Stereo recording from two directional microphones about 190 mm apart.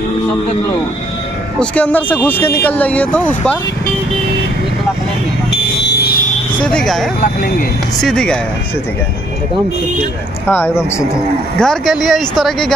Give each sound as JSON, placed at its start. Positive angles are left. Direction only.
{"t": 1.6, "sound": "speech", "side_deg": 10}
{"t": 5.8, "sound": "fire alarm", "side_deg": 60}
{"t": 6.6, "sound": "speech", "side_deg": 5}
{"t": 7.2, "sound": "speech", "side_deg": 45}
{"t": 8.0, "sound": "speech", "side_deg": 5}
{"t": 10.5, "sound": "speech", "side_deg": 10}